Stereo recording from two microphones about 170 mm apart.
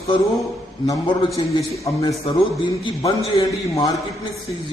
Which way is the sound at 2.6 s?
20° left (ahead or behind).